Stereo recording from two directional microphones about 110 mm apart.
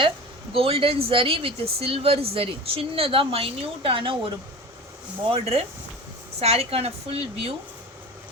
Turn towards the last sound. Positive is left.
turn(degrees=-60)  # may be behind; listen again after turning